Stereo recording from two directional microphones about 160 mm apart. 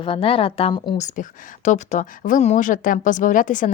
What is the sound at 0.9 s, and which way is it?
Speech, 50° left (ahead or behind).